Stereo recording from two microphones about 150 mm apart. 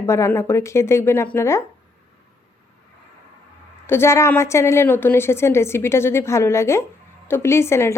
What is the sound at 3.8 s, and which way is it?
Speech, 15° left (ahead or behind).